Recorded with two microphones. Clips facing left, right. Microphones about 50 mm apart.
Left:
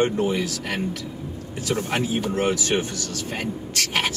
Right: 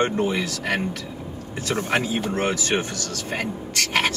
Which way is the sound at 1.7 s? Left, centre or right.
Right.